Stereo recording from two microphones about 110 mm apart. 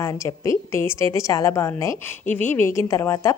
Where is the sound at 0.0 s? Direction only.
30° left (ahead or behind).